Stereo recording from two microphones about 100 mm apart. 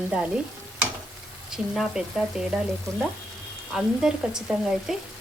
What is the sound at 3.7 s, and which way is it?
Speech, 5° right (ahead or behind).